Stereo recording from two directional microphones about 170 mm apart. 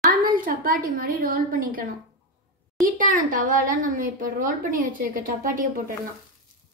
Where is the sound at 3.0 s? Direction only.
50° right (ahead or behind).